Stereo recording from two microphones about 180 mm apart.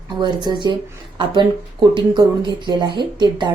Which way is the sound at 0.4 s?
25° right (ahead or behind).